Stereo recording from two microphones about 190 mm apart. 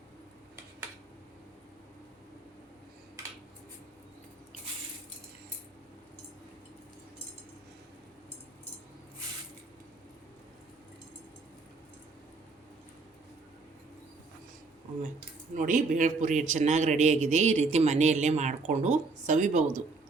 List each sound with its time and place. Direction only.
15.5 s a man's voice: 45° right (ahead or behind)